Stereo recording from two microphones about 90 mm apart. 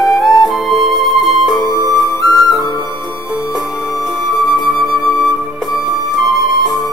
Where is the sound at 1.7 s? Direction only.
50° right (ahead or behind).